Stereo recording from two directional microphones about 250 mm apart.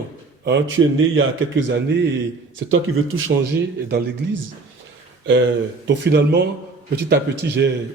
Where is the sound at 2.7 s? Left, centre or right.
Right.